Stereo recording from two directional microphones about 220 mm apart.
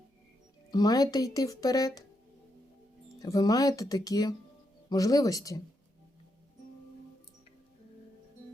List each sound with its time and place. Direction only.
0.7 s speech: 15° left (ahead or behind)
3.2 s speech: 15° left (ahead or behind)